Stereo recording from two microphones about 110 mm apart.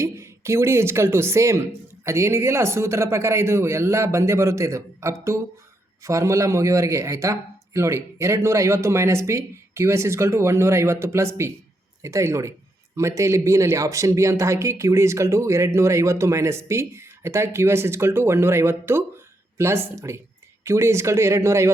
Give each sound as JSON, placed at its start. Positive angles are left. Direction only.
{"t": 0.0, "sound": "speech", "side_deg": -25}